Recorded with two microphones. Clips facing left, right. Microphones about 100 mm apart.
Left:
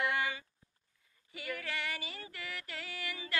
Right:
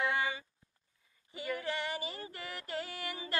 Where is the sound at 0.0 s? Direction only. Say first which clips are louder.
Right 1 dB; 20° right (ahead or behind).